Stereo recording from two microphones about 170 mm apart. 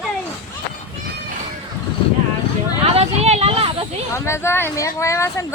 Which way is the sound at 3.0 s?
40° right (ahead or behind).